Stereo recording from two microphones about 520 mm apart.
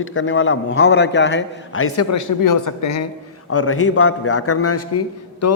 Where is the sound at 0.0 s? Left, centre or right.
Left.